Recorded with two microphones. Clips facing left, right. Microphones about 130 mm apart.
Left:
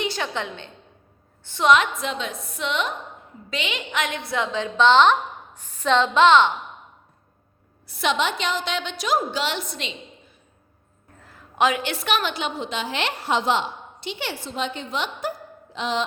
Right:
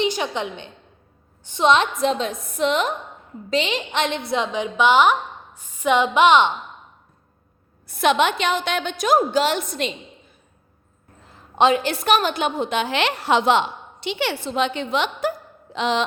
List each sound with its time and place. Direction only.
0.0 s a woman's voice: 15° right (ahead or behind)
7.9 s a woman's voice: 50° right (ahead or behind)
11.2 s a woman's voice: 25° right (ahead or behind); by 15.3 s 75° right (ahead or behind)
15.7 s a sound: 80° right